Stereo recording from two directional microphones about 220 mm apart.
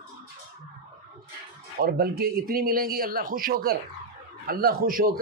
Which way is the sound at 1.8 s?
40° right (ahead or behind).